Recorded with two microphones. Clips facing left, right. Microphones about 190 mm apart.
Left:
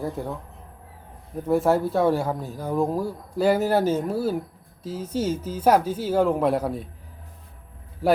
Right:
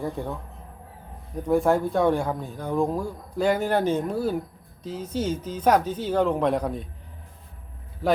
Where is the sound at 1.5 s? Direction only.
5° left (ahead or behind).